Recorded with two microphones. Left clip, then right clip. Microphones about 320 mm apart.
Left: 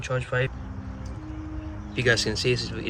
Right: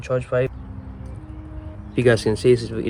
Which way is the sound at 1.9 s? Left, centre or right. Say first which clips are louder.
Right 5 dB; centre.